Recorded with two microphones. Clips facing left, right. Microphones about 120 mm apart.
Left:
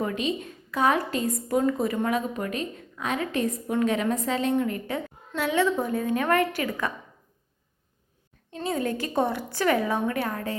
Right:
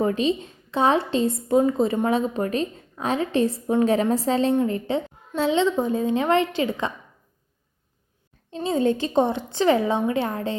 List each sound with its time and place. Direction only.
0.0 s a woman's voice: 30° right (ahead or behind)
8.4 s a woman's voice: 25° right (ahead or behind)